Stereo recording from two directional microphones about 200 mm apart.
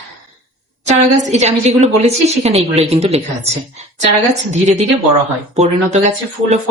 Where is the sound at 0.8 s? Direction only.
35° right (ahead or behind).